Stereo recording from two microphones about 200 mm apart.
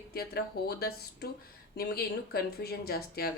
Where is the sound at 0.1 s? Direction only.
50° left (ahead or behind).